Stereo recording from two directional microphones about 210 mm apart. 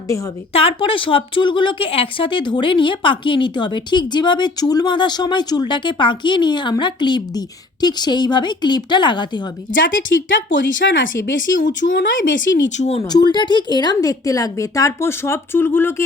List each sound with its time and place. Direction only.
0.5 s speech: 25° left (ahead or behind)
9.7 s speech: 65° left (ahead or behind)
12.7 s speech: 30° left (ahead or behind)
13.1 s a woman's voice: 20° left (ahead or behind)